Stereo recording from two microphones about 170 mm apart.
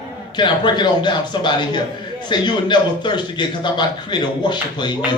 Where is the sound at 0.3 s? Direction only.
25° left (ahead or behind).